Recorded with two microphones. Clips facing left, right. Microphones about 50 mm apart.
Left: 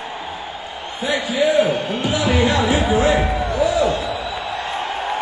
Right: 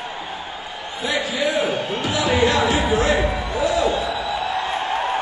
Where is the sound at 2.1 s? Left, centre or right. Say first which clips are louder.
Left 1 dB; centre.